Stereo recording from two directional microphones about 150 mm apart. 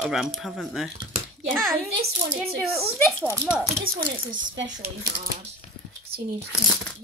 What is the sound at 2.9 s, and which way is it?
Speech, 5° left (ahead or behind).